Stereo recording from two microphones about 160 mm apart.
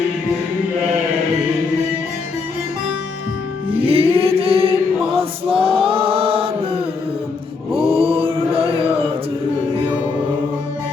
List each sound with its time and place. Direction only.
3.7 s chant: 35° right (ahead or behind)